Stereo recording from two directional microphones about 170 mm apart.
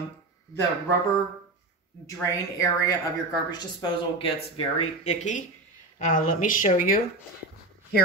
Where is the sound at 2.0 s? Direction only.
20° left (ahead or behind); by 7.0 s 55° left (ahead or behind).